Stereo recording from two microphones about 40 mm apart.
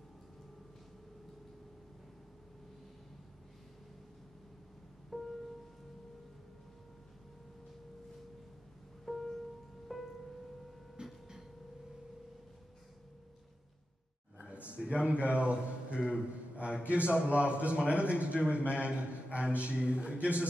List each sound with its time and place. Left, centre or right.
5.1 s music: centre
9.0 s music: centre
11.0 s a sound: right
14.8 s a sound: right
15.0 s a man's voice: right
18.6 s a man's voice: left
18.9 s a man's voice: right